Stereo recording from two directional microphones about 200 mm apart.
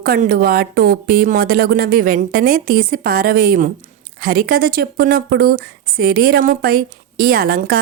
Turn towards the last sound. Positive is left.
turn(degrees=-50)  # may be behind; listen again after turning